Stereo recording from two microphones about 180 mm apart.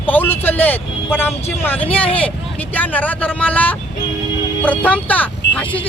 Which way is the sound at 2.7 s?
10° left (ahead or behind).